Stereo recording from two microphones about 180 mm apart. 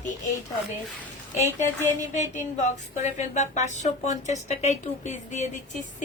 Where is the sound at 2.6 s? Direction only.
40° left (ahead or behind).